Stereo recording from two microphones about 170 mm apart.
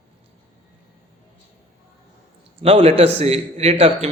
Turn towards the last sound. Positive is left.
turn(degrees=-35)  # may be behind; listen again after turning